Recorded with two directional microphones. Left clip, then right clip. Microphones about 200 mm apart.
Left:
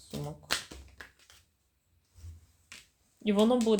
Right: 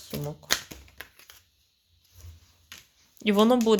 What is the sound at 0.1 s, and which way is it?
Shuffling cards, 25° right (ahead or behind).